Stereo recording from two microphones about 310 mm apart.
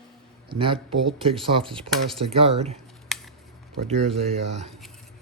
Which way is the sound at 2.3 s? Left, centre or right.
Centre.